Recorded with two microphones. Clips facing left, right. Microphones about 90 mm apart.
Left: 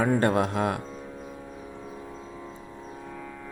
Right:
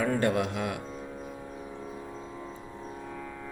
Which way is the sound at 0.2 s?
40° left (ahead or behind).